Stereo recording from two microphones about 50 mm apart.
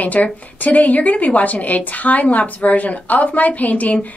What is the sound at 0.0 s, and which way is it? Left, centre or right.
A woman's voice, left.